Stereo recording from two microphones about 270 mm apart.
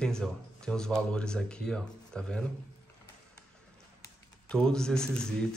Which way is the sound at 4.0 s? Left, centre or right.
Centre.